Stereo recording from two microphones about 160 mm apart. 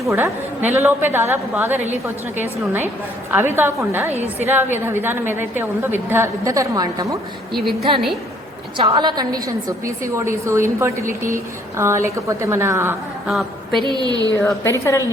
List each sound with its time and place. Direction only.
0.0 s a woman's voice: 15° right (ahead or behind)
7.5 s a woman's voice: centre (ahead or behind)
7.8 s a woman's voice: 35° right (ahead or behind); by 13.0 s 15° right (ahead or behind)
13.8 s a woman's voice: 25° right (ahead or behind)
14.4 s a woman's voice: 15° left (ahead or behind)